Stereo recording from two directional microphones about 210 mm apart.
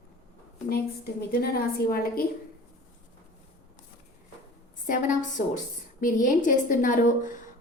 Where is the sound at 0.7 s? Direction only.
45° left (ahead or behind).